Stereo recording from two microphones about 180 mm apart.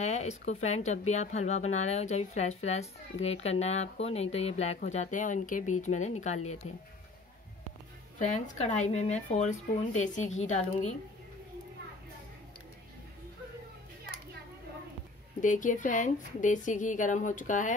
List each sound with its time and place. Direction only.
0.0 s speech: 40° left (ahead or behind)
8.2 s speech: 40° left (ahead or behind)
15.4 s a woman's voice: 45° left (ahead or behind)